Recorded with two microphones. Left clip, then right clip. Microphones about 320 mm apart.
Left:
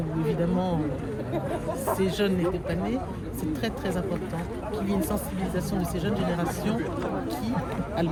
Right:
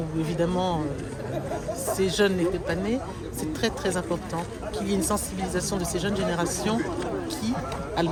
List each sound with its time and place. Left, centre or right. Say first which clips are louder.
2.0 s speech: right 3 dB; centre